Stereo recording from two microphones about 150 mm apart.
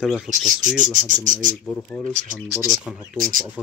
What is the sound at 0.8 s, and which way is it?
Speech, 60° right (ahead or behind).